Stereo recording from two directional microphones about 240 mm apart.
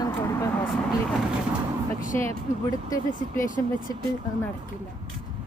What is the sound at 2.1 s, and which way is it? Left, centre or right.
Speech, centre.